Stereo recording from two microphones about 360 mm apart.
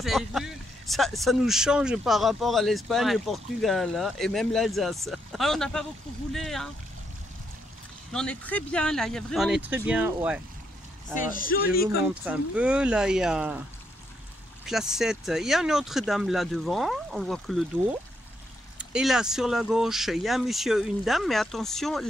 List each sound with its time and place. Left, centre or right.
0.0 s speech: centre
8.1 s speech: centre
11.1 s speech: left
11.8 s speech: centre
14.7 s speech: centre
18.8 s speech: centre